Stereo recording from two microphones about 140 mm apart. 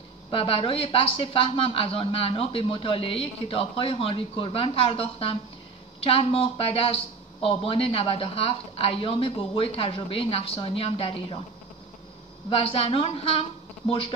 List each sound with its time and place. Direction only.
0.3 s speech: 40° left (ahead or behind)
12.4 s speech: 40° left (ahead or behind)